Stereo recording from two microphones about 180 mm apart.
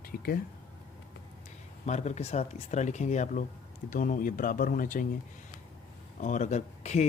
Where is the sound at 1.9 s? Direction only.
40° left (ahead or behind).